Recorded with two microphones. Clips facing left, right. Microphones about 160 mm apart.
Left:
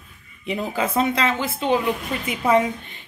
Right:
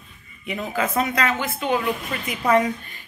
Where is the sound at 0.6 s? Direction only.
30° left (ahead or behind).